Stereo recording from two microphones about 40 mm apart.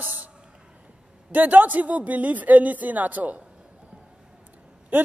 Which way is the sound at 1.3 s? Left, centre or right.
Right.